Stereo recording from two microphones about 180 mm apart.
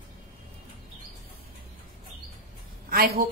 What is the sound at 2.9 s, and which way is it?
Speech, 60° right (ahead or behind).